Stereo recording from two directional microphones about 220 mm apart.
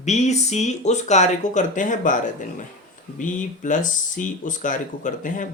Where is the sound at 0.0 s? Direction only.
30° left (ahead or behind).